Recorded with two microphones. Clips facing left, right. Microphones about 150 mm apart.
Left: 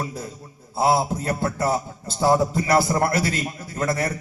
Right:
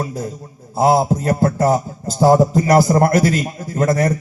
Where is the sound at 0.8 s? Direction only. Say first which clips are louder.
Right 6 dB; 45° right (ahead or behind).